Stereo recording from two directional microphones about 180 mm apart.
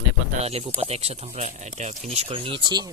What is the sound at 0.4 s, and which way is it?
Speech, 35° right (ahead or behind).